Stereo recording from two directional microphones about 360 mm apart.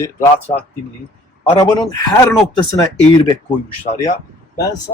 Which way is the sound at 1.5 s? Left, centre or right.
Centre.